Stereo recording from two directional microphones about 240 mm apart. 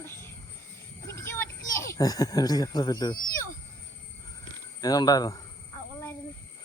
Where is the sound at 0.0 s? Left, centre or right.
Centre.